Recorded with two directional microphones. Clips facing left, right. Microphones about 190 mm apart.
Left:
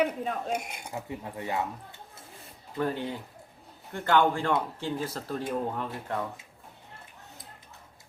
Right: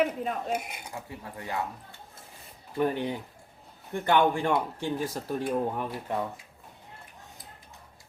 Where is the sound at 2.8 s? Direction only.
15° right (ahead or behind).